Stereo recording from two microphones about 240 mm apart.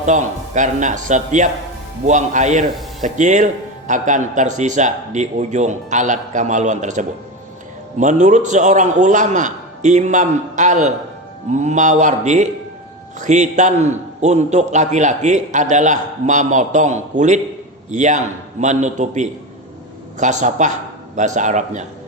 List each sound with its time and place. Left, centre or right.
0.0 s a man's voice: right